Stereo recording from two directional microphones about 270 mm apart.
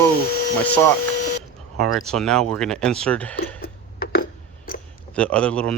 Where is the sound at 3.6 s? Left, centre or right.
Left.